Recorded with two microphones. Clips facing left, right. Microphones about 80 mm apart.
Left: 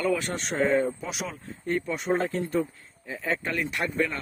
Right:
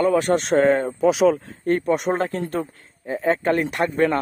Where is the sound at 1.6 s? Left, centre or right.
Right.